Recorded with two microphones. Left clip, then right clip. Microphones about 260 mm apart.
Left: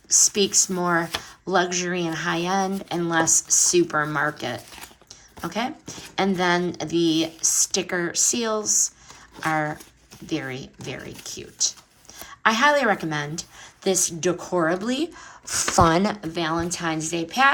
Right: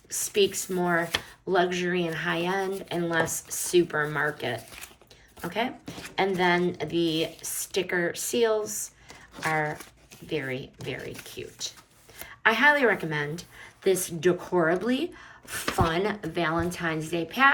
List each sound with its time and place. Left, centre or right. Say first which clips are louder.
0.1 s a woman's voice: left 5 dB; left